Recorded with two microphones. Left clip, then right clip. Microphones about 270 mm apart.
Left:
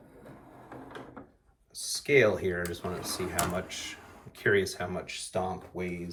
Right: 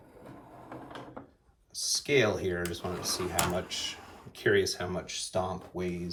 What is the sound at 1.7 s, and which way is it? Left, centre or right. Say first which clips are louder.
Speech: left 2 dB; centre.